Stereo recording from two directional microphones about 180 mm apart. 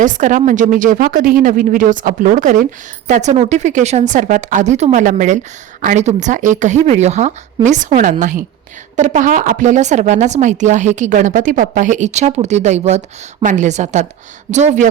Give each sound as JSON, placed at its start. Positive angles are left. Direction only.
{"t": 0.0, "sound": "a woman's voice", "side_deg": -45}